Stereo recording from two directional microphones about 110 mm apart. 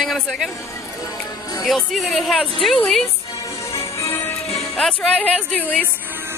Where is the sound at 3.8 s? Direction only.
30° left (ahead or behind).